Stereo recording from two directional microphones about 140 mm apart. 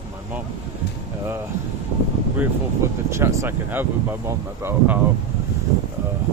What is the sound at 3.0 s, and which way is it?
Speech, 20° right (ahead or behind).